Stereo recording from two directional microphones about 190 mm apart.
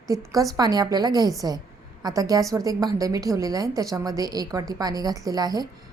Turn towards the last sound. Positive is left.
turn(degrees=-20)  # may be behind; listen again after turning